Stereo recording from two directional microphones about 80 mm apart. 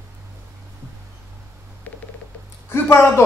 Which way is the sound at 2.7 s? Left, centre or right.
Left.